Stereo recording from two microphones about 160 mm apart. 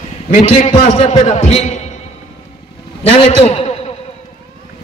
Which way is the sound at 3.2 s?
45° left (ahead or behind).